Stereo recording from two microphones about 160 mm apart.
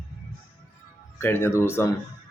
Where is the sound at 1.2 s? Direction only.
15° left (ahead or behind).